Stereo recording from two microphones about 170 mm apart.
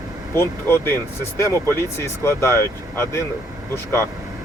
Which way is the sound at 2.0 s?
15° left (ahead or behind).